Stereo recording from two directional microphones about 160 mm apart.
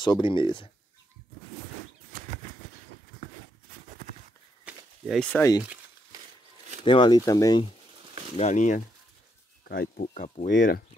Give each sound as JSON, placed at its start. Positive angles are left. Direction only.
{"t": 0.0, "sound": "speech", "side_deg": 30}
{"t": 4.6, "sound": "a sound", "side_deg": 0}
{"t": 6.8, "sound": "speech", "side_deg": 30}
{"t": 8.4, "sound": "speech", "side_deg": 50}
{"t": 9.7, "sound": "speech", "side_deg": 65}